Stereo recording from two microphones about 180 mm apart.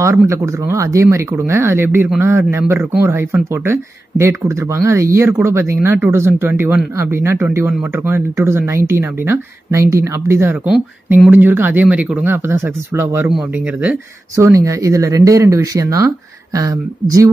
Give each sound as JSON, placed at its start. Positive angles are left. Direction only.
{"t": 0.3, "sound": "speech", "side_deg": -15}